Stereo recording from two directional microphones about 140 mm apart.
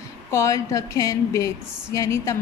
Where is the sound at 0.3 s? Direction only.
20° left (ahead or behind).